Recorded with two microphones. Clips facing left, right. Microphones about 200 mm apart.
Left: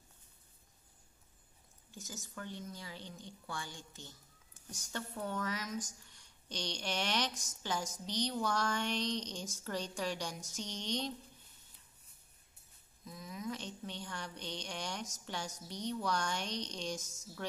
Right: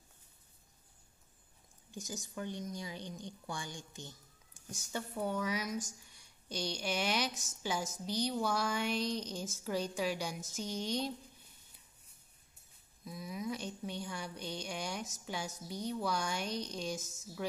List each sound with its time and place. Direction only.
1.9 s speech: 15° right (ahead or behind)
13.0 s a woman's voice: 10° right (ahead or behind)